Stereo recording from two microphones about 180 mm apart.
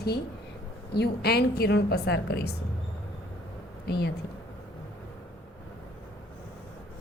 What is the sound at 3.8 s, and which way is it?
Speech, 65° left (ahead or behind).